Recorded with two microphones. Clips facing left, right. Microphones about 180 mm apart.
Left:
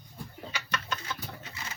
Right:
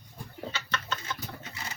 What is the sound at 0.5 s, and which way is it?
Bird, 15° left (ahead or behind).